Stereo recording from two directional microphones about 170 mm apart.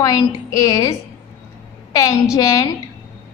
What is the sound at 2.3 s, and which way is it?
Speech, 20° left (ahead or behind).